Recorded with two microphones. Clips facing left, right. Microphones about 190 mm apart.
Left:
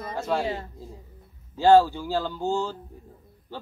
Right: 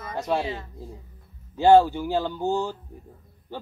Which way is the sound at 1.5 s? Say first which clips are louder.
Right 1 dB; 20° right (ahead or behind).